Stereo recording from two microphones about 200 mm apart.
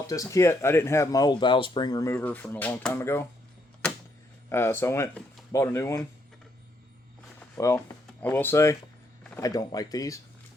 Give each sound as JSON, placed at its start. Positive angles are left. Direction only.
{"t": 0.1, "sound": "speech", "side_deg": 15}
{"t": 4.4, "sound": "speech", "side_deg": 10}
{"t": 7.3, "sound": "speech", "side_deg": 10}